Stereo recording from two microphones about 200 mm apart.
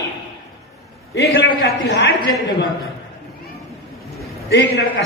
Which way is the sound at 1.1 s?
60° left (ahead or behind).